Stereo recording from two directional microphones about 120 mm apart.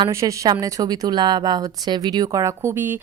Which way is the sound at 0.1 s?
25° right (ahead or behind).